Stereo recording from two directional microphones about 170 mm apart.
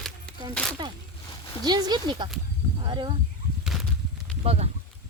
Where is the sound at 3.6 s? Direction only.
Centre (ahead or behind).